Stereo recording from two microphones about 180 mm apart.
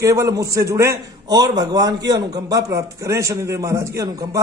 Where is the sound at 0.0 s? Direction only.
15° right (ahead or behind).